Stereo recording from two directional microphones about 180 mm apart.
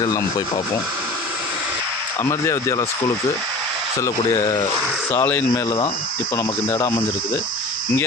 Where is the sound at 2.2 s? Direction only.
15° left (ahead or behind).